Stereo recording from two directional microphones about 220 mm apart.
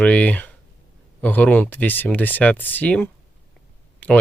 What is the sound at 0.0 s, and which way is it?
Speech, 5° left (ahead or behind).